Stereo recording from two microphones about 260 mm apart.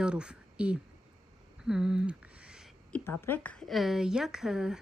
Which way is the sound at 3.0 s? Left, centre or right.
Centre.